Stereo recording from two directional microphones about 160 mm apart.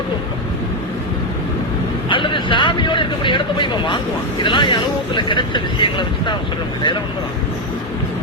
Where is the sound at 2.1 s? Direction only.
30° left (ahead or behind).